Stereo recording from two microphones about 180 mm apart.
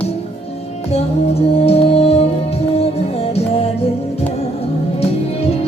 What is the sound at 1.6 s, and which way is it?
Music, 35° left (ahead or behind).